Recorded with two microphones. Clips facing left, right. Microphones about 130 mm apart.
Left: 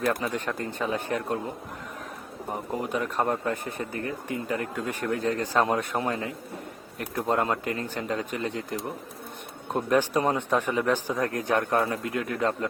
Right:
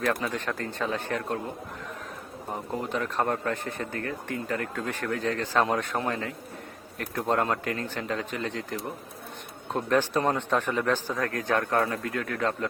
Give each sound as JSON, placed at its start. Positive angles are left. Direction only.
{"t": 0.0, "sound": "speech", "side_deg": 10}
{"t": 2.5, "sound": "speech", "side_deg": 10}
{"t": 7.2, "sound": "speech", "side_deg": 0}
{"t": 9.7, "sound": "speech", "side_deg": 10}